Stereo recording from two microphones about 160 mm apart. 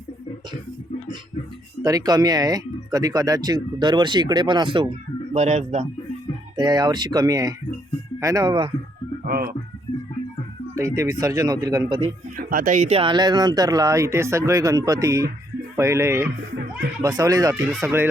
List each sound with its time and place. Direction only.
1.8 s speech: 20° right (ahead or behind)
5.3 s speech: 45° right (ahead or behind)
6.6 s speech: 25° right (ahead or behind)
9.2 s speech: 60° right (ahead or behind)
9.9 s music: 35° left (ahead or behind)
10.8 s speech: 20° right (ahead or behind)
12.4 s speech: 65° right (ahead or behind); by 18.1 s 15° right (ahead or behind)